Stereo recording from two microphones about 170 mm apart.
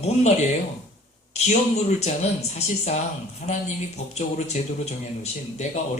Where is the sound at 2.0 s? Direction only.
40° left (ahead or behind).